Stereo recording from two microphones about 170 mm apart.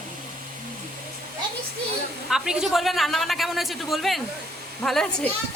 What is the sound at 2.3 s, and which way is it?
A man's voice, 5° right (ahead or behind).